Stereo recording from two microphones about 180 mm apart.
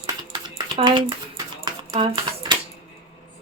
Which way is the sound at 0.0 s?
25° right (ahead or behind).